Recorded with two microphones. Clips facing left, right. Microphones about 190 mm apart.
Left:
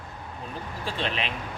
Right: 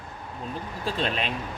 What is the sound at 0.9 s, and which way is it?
Speech, 40° right (ahead or behind).